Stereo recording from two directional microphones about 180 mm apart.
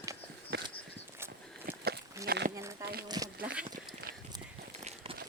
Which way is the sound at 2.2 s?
60° right (ahead or behind).